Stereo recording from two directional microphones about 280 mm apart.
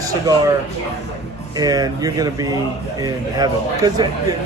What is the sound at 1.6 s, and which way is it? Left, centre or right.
Speech, centre.